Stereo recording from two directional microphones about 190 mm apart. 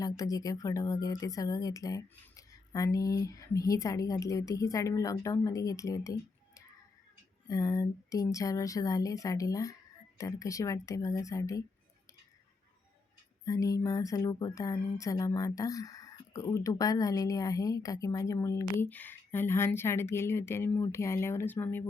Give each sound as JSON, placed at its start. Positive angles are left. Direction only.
{"t": 0.0, "sound": "speech", "side_deg": 20}
{"t": 13.4, "sound": "speech", "side_deg": 15}